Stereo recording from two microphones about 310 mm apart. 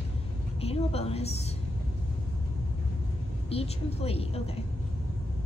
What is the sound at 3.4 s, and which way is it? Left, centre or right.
Speech, centre.